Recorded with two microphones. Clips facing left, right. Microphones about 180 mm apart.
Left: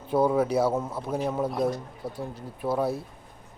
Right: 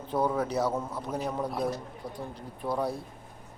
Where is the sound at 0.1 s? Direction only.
10° left (ahead or behind).